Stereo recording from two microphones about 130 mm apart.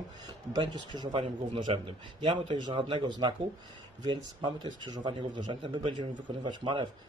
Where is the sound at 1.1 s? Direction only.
45° right (ahead or behind).